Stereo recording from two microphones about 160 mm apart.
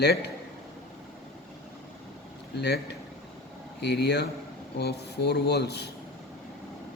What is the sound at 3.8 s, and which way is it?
Speech, 90° left.